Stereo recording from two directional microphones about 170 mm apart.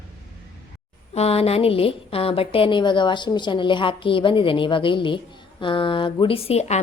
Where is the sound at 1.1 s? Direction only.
35° left (ahead or behind).